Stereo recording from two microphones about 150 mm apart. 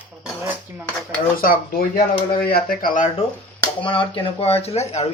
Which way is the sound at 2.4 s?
80° left.